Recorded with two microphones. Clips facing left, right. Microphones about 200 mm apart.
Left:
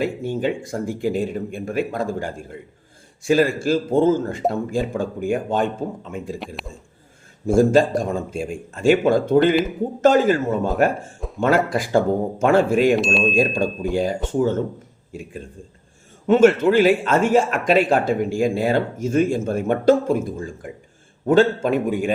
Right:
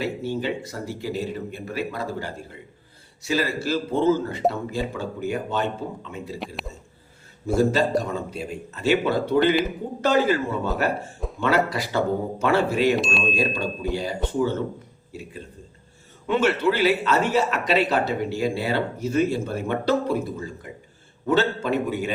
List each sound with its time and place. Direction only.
0.0 s a man's voice: 50° left (ahead or behind)
7.4 s a man's voice: 50° left (ahead or behind)
13.0 s speech: centre (ahead or behind)
13.3 s a man's voice: 50° left (ahead or behind)